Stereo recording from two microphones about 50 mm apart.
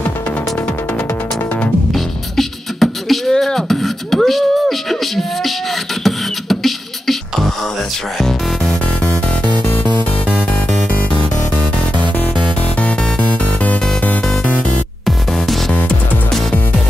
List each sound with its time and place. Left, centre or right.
2.0 s beatboxing: centre
8.2 s music: centre
12.8 s music: left
15.0 s music: centre